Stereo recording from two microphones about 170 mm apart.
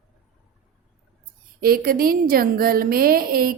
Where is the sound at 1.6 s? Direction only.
60° right (ahead or behind).